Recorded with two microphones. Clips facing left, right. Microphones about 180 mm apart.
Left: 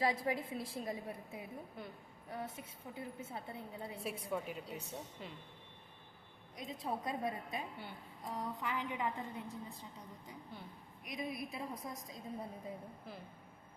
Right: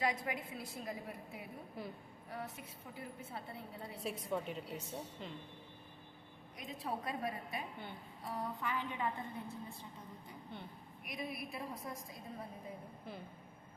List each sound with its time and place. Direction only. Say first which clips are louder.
0.0 s a woman's voice: left 3 dB; 30° left (ahead or behind)
1.8 s speech: right 6 dB; centre (ahead or behind)
2.3 s a woman's voice: left 1 dB; 25° left (ahead or behind)
4.4 s speech: right 1 dB; centre (ahead or behind)
6.6 s a woman's voice: left 1 dB; 20° left (ahead or behind)
11.0 s a woman's voice: left 2 dB; 20° left (ahead or behind)